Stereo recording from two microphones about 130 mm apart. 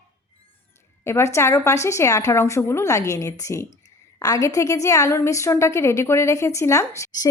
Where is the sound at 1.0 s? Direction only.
20° left (ahead or behind).